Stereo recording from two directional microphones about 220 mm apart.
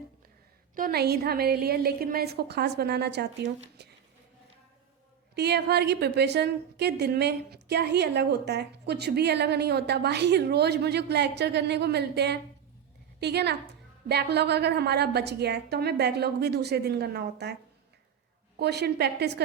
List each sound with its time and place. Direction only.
0.8 s a woman's voice: 45° right (ahead or behind)
5.3 s a woman's voice: 50° right (ahead or behind)
18.6 s a woman's voice: 50° right (ahead or behind)